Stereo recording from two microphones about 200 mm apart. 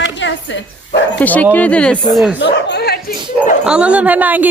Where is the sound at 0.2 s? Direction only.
65° left (ahead or behind).